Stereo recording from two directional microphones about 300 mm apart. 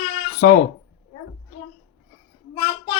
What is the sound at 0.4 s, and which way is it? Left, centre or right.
Speech, left.